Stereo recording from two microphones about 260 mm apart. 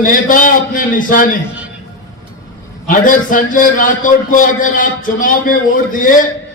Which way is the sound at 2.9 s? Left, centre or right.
Left.